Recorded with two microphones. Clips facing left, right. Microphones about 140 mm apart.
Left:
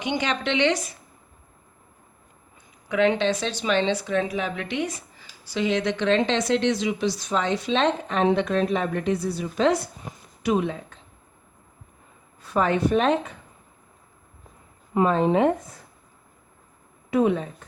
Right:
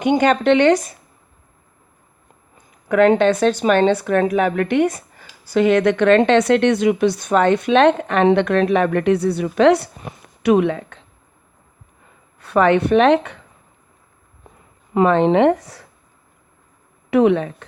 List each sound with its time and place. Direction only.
0.0 s speech: 50° right (ahead or behind)
2.6 s a woman's voice: 50° right (ahead or behind); by 11.0 s 70° right (ahead or behind)
12.4 s speech: 70° right (ahead or behind)
14.9 s speech: 75° right (ahead or behind)
17.1 s speech: 75° right (ahead or behind)